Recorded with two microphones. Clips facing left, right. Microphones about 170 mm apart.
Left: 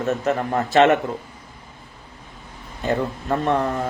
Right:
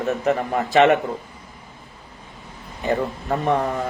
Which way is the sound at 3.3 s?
15° right (ahead or behind).